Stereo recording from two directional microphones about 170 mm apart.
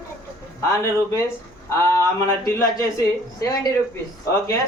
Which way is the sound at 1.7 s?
15° left (ahead or behind).